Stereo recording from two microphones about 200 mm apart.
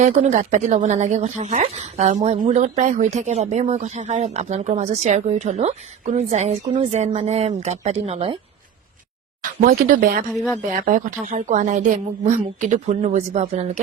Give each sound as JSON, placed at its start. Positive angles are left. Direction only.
{"t": 0.0, "sound": "speech", "side_deg": -35}
{"t": 9.4, "sound": "speech", "side_deg": -45}